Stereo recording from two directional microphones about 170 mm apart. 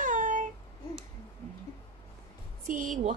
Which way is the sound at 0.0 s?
50° right (ahead or behind).